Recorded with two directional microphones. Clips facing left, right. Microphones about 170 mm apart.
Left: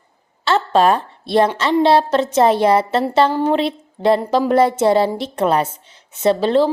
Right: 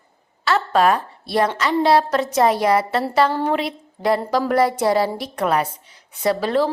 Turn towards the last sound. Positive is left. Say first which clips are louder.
# left 4 dB
turn(degrees=25)  # may be behind; listen again after turning